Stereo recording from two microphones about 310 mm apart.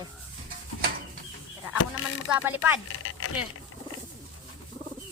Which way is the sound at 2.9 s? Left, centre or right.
Left.